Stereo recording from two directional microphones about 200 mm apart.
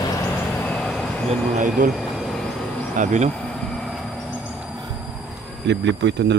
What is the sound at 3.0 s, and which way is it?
Speech, 35° right (ahead or behind).